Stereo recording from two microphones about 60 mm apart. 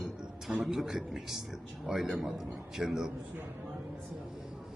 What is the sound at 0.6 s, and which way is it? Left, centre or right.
A man's voice, centre.